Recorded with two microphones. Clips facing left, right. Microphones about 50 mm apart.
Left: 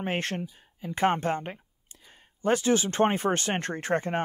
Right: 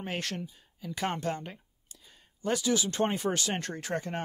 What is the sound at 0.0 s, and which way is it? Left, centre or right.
Speech, left.